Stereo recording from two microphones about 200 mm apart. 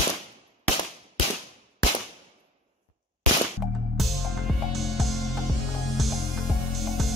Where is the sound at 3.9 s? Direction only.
Centre (ahead or behind).